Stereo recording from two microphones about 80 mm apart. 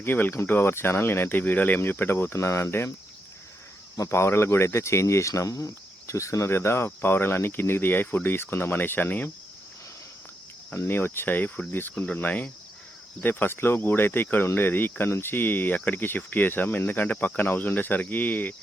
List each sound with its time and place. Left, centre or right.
0.0 s speech: left
3.9 s speech: left
10.8 s speech: left